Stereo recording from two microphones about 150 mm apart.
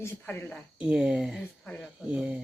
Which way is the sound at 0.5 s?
5° right (ahead or behind).